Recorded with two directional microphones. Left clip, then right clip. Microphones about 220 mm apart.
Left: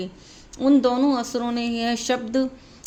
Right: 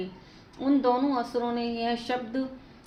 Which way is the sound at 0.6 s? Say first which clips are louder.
Left 6 dB; 55° left (ahead or behind).